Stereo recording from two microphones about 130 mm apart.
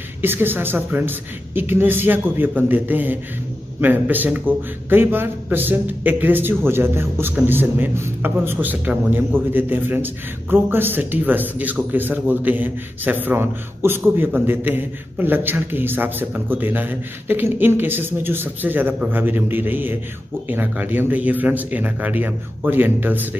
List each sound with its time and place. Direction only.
0.2 s speech: 15° right (ahead or behind)